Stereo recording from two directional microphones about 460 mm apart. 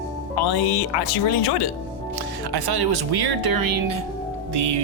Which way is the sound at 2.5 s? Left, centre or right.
Right.